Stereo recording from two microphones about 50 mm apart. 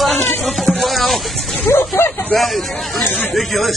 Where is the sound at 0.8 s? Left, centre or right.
Centre.